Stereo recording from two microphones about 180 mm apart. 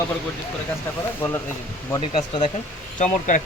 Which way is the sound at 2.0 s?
40° left (ahead or behind).